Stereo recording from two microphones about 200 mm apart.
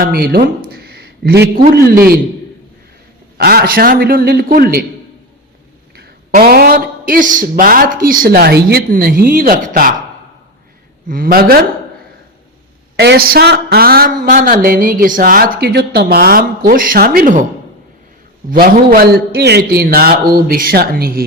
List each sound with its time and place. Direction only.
0.0 s a woman's voice: 50° right (ahead or behind)
3.3 s a woman's voice: 50° right (ahead or behind)
6.0 s a woman's voice: 50° right (ahead or behind)
11.1 s a woman's voice: 45° right (ahead or behind)
13.0 s a woman's voice: 55° right (ahead or behind)
18.5 s a woman's voice: 50° right (ahead or behind)